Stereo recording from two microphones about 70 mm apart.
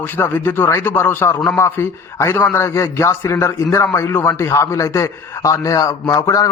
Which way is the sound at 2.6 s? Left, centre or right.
Left.